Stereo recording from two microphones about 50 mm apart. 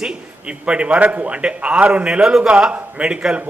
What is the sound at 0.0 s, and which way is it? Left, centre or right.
A man's voice, right.